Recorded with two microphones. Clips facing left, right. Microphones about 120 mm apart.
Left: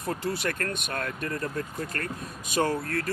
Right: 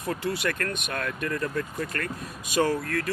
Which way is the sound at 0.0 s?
40° left (ahead or behind).